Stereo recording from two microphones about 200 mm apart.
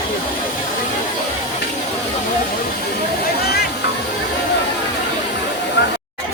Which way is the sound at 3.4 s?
50° left (ahead or behind).